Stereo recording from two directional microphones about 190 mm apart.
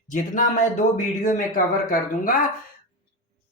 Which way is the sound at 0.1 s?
40° left (ahead or behind).